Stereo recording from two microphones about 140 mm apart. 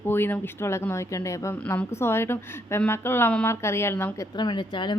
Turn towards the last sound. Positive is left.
turn(degrees=35)  # may be behind; listen again after turning